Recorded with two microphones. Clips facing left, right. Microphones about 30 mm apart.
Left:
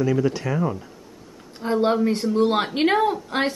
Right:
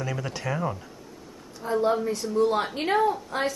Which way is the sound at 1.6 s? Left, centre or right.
Left.